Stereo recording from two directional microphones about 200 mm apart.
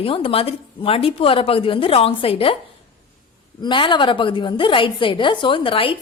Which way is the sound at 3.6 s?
25° left (ahead or behind).